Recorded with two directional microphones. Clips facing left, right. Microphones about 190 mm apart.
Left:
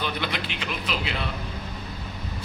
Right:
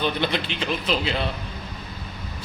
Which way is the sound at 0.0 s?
30° right (ahead or behind).